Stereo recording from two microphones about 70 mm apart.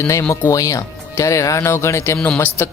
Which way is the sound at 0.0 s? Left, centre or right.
Left.